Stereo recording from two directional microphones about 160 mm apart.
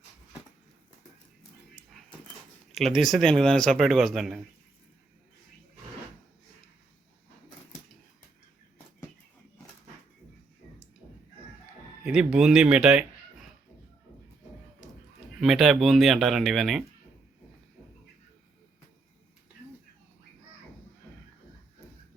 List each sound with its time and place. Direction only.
2.7 s speech: centre (ahead or behind)
12.0 s speech: 5° right (ahead or behind)
15.4 s speech: centre (ahead or behind)